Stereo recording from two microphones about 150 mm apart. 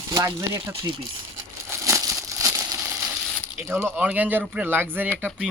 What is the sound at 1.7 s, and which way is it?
Crumpling, 20° right (ahead or behind).